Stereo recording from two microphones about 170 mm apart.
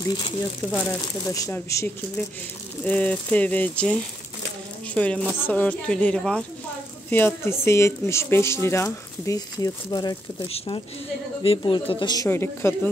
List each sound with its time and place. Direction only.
0.0 s a woman's voice: 25° left (ahead or behind)
11.4 s speech: 30° left (ahead or behind); by 12.9 s 15° left (ahead or behind)